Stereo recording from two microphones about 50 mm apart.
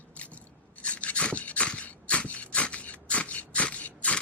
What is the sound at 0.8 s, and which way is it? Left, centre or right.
Filing, left.